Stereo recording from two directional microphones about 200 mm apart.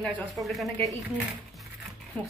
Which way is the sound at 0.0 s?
Centre (ahead or behind).